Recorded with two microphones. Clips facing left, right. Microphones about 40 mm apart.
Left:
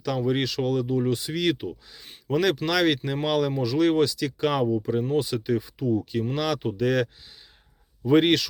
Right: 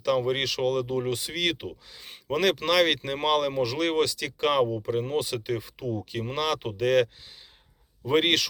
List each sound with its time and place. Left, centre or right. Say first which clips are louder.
0.0 s speech: even; right
3.5 s speech: left 4 dB; right
6.3 s speech: even; right
6.6 s speech: right 1 dB; right